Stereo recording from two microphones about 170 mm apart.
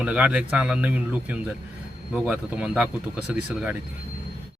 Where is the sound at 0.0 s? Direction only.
5° right (ahead or behind).